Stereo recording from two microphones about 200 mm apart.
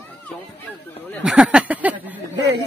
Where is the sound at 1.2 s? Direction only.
5° right (ahead or behind).